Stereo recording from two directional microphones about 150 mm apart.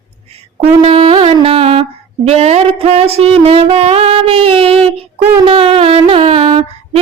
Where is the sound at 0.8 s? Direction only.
40° right (ahead or behind).